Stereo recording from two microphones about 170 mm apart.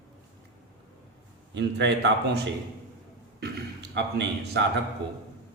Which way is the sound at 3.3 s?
75° right (ahead or behind).